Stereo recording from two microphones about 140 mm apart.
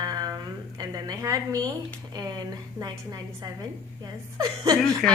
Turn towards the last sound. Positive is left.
turn(degrees=5)  # may be behind; listen again after turning